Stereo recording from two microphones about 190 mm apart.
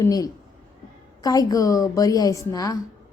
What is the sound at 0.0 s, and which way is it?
A woman's voice, 20° left (ahead or behind).